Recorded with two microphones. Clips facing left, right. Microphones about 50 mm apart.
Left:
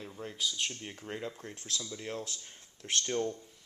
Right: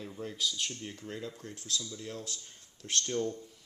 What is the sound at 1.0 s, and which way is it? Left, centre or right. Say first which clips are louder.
Speech: left 3 dB; left.